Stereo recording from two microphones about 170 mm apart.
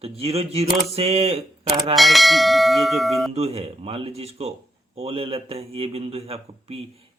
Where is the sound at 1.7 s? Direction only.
25° right (ahead or behind).